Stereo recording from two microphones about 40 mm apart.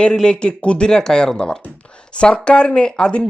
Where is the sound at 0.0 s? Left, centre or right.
Centre.